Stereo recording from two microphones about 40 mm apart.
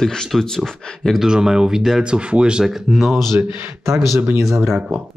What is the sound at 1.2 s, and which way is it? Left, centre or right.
Speech, centre.